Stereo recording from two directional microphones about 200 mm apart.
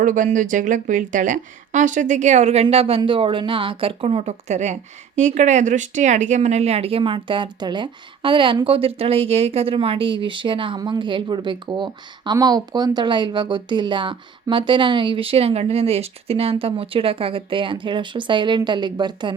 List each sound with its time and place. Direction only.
0.0 s a woman's voice: 40° right (ahead or behind); by 19.3 s 20° right (ahead or behind)